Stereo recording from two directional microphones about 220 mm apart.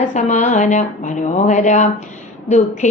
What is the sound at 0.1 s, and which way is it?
Female singing, 35° left (ahead or behind).